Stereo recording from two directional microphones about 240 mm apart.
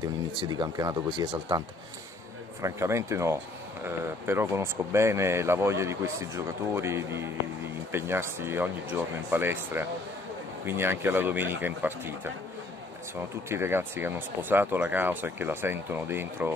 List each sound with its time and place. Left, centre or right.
0.0 s speech: centre
2.6 s speech: centre